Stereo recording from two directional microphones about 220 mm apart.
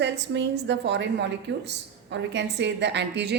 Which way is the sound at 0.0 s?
50° right (ahead or behind).